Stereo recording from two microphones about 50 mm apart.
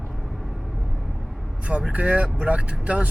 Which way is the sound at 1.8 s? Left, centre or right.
Right.